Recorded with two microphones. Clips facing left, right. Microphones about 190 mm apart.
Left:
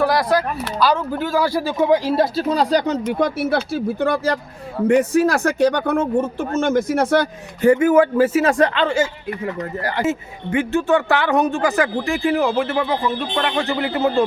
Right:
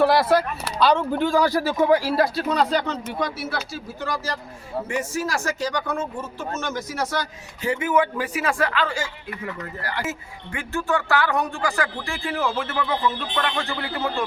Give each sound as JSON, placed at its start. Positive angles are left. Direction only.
{"t": 0.0, "sound": "speech", "side_deg": 0}
{"t": 2.6, "sound": "speech", "side_deg": 40}
{"t": 8.7, "sound": "speech", "side_deg": 25}
{"t": 12.8, "sound": "speech", "side_deg": 30}
{"t": 13.4, "sound": "speech", "side_deg": 20}